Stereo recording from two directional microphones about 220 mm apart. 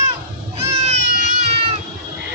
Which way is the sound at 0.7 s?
30° right (ahead or behind).